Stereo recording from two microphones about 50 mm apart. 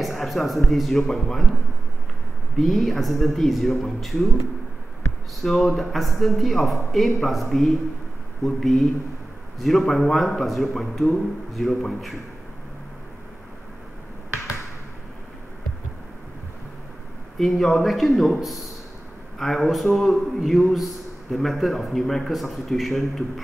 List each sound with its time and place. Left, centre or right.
0.0 s a man's voice: centre
5.4 s a man's voice: centre
17.4 s a man's voice: centre